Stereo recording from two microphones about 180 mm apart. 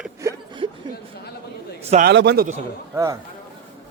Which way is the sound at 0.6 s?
30° right (ahead or behind).